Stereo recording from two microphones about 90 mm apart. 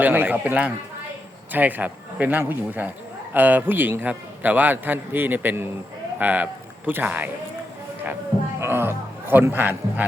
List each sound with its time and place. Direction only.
0.0 s a man's voice: 20° right (ahead or behind)
8.6 s a man's voice: 25° right (ahead or behind)